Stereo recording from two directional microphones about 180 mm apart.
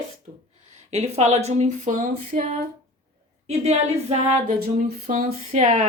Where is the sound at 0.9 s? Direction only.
35° right (ahead or behind).